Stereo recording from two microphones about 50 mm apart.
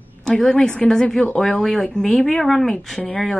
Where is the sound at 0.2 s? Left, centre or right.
Centre.